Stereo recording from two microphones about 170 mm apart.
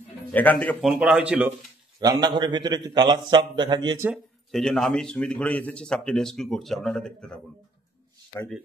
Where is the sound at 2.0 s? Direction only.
25° right (ahead or behind).